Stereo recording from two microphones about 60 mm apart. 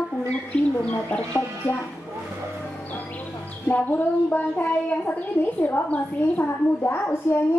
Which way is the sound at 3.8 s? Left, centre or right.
Left.